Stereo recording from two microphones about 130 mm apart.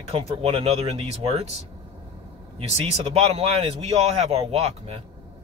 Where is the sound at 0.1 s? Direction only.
50° right (ahead or behind).